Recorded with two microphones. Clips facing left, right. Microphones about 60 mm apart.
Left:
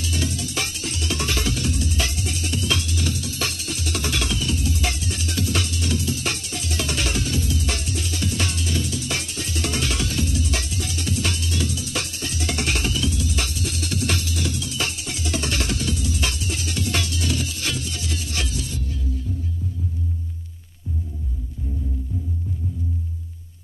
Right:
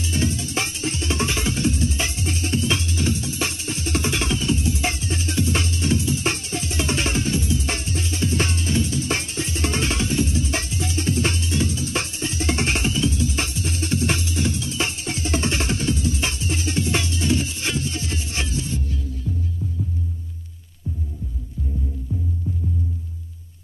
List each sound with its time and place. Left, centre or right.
0.0 s music: right
19.2 s music: centre
19.6 s music: centre
20.9 s throbbing: centre
22.1 s music: centre